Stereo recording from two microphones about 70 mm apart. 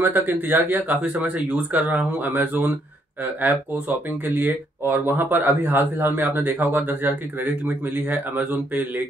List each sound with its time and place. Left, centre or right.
0.0 s speech: right